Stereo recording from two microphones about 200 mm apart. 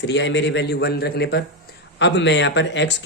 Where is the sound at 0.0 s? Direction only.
60° left (ahead or behind).